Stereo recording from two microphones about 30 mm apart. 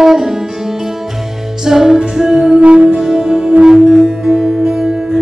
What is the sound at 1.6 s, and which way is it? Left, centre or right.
Music, centre.